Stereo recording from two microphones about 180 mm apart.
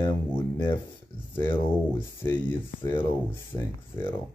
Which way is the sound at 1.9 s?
15° left (ahead or behind).